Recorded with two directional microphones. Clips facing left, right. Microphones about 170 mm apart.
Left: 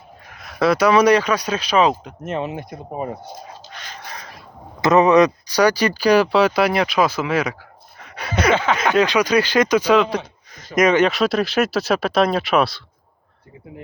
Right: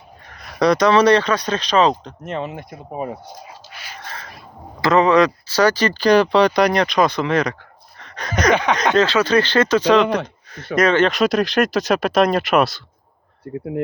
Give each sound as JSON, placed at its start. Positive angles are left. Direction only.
{"t": 0.3, "sound": "speech", "side_deg": 0}
{"t": 3.7, "sound": "a sound", "side_deg": -10}
{"t": 4.8, "sound": "speech", "side_deg": 20}
{"t": 7.9, "sound": "a sound", "side_deg": 10}
{"t": 9.0, "sound": "speech", "side_deg": 15}
{"t": 13.4, "sound": "speech", "side_deg": -70}